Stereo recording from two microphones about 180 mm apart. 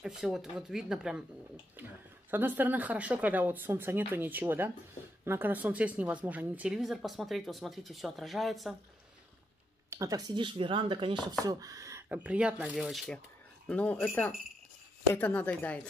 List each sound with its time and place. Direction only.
0.0 s speech: centre (ahead or behind)
2.3 s speech: 10° right (ahead or behind)
9.8 s speech: 20° right (ahead or behind); by 15.9 s 10° left (ahead or behind)